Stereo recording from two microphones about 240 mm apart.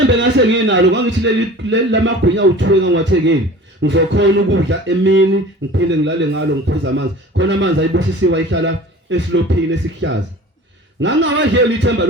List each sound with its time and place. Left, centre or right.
0.1 s speech: right
11.0 s speech: right